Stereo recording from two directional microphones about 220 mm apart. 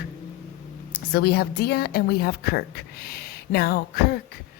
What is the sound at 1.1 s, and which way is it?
Speech, 45° left (ahead or behind).